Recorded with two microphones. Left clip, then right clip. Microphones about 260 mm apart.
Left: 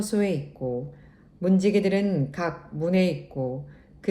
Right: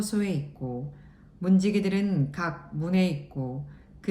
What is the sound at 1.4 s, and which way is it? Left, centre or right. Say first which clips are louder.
A woman's voice: left 4 dB; centre.